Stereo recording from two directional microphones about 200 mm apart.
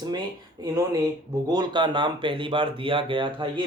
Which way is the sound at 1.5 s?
20° right (ahead or behind).